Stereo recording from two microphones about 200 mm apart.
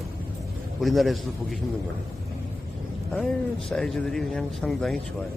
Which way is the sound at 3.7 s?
Centre (ahead or behind).